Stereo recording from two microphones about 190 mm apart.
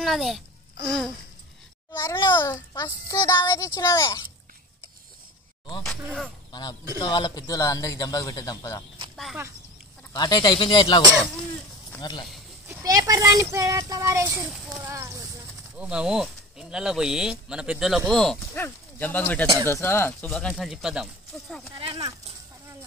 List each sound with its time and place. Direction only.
0.0 s a child's voice: centre (ahead or behind); by 4.3 s 15° left (ahead or behind)
6.0 s speech: centre (ahead or behind)
6.5 s a man's voice: 20° left (ahead or behind)
9.1 s a sound: centre (ahead or behind)
10.1 s a man's voice: 20° left (ahead or behind)
12.0 s a man's voice: 20° left (ahead or behind)
12.6 s a child's voice: 20° right (ahead or behind); by 21.6 s centre (ahead or behind)
21.7 s speech: 25° right (ahead or behind)